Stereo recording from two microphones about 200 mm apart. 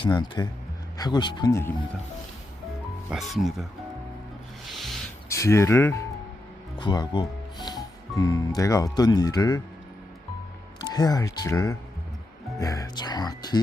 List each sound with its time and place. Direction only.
0.0 s speech: 20° left (ahead or behind)
3.1 s speech: centre (ahead or behind)
4.6 s a sound: centre (ahead or behind)
5.3 s speech: 15° left (ahead or behind)
10.8 s speech: 20° left (ahead or behind)